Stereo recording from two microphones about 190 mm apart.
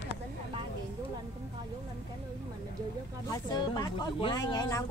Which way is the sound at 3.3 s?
20° left (ahead or behind).